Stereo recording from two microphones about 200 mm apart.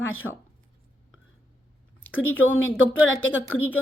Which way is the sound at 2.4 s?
85° left.